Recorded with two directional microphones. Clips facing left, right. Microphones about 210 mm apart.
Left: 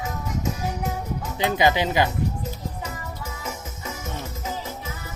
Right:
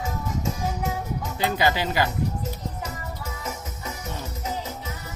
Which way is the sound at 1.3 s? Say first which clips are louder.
Left 3 dB; 20° left (ahead or behind).